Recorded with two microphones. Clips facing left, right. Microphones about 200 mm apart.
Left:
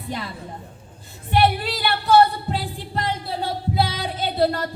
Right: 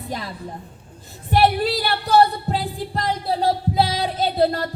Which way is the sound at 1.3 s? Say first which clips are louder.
Right 2 dB; 40° right (ahead or behind).